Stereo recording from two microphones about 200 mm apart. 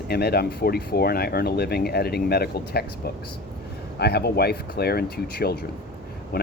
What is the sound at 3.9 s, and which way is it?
Speech, 55° left (ahead or behind).